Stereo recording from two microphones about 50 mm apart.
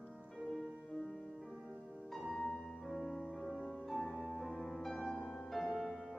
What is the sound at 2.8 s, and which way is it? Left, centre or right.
Music, centre.